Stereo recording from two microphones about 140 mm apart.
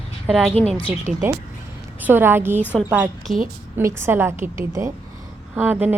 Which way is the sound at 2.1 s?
15° right (ahead or behind).